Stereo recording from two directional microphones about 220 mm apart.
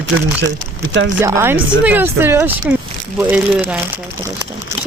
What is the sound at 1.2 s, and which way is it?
Speech, 10° right (ahead or behind).